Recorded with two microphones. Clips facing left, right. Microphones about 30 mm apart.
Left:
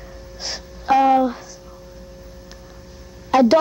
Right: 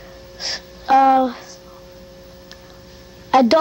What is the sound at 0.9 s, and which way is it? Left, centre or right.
Speech, centre.